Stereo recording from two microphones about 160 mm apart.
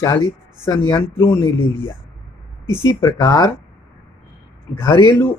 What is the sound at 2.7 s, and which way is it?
Speech, 25° right (ahead or behind).